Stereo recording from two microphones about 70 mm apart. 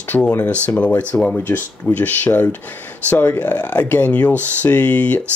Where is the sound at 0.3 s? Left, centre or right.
Left.